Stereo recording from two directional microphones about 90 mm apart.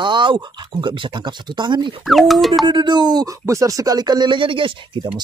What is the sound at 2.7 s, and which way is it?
Speech, 55° right (ahead or behind).